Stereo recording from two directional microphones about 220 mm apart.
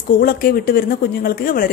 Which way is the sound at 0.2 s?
40° left (ahead or behind).